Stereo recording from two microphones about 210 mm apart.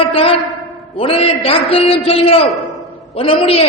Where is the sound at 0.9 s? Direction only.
25° left (ahead or behind).